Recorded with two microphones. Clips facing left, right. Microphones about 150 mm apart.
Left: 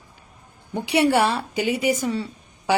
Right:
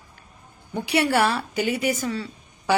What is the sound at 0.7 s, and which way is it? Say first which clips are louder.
A woman's voice: left 3 dB; 20° left (ahead or behind).